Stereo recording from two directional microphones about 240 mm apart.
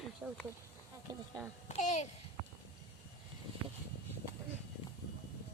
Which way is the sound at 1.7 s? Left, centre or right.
Left.